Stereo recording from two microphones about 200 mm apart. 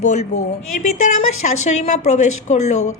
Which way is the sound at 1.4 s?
35° left (ahead or behind).